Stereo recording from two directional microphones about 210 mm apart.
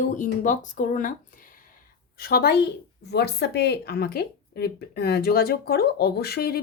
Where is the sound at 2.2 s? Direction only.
45° left (ahead or behind).